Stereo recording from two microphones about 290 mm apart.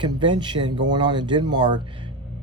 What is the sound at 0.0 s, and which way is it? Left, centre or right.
Speech, centre.